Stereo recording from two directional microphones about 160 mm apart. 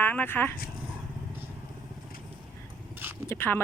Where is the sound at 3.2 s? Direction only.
15° left (ahead or behind).